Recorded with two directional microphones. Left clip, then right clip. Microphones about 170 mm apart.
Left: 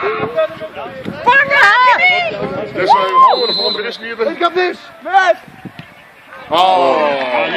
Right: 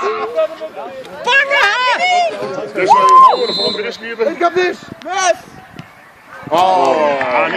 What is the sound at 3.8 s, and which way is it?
Speech, 15° left (ahead or behind).